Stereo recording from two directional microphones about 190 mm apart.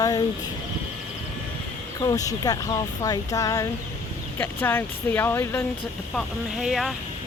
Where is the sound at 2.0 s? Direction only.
20° left (ahead or behind).